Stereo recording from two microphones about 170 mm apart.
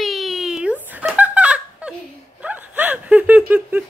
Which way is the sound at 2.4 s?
10° right (ahead or behind).